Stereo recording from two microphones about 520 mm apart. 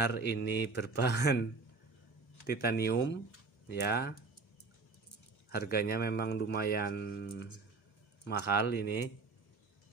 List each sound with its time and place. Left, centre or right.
0.0 s speech: centre
2.4 s speech: centre
5.5 s speech: centre